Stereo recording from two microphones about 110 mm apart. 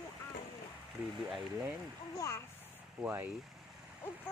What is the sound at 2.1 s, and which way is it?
Speech, 25° left (ahead or behind).